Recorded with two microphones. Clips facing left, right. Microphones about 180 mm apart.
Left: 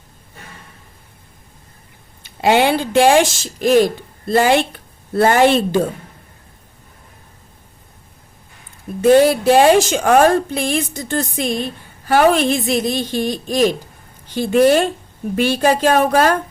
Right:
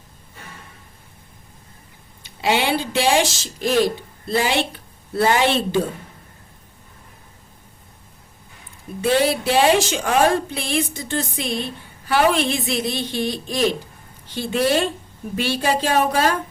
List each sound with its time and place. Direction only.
2.2 s a woman's voice: 50° left (ahead or behind)
9.0 s a woman's voice: 45° left (ahead or behind)